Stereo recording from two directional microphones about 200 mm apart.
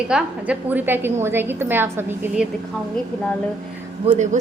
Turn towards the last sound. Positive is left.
turn(degrees=-35)  # may be behind; listen again after turning